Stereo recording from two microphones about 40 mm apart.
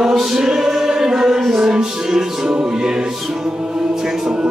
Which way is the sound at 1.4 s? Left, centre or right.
Centre.